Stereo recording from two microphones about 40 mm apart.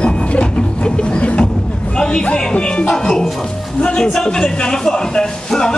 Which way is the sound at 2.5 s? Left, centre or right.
Left.